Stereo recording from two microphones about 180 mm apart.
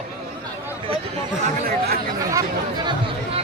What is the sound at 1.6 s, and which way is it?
Speech, 60° right (ahead or behind).